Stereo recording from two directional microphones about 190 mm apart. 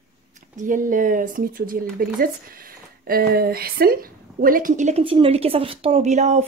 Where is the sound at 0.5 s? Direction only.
45° right (ahead or behind).